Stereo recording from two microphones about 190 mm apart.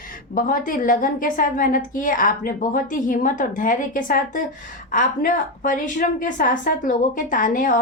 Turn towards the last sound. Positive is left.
turn(degrees=45)  # may be behind; listen again after turning